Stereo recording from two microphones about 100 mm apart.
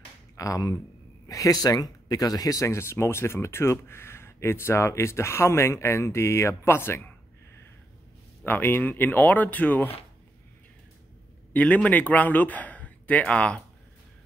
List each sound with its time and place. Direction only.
0.4 s speech: 35° left (ahead or behind)
8.5 s speech: 20° left (ahead or behind)
11.5 s a man's voice: 15° left (ahead or behind)